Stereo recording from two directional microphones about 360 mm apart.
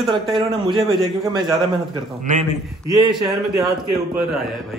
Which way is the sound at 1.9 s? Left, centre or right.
Centre.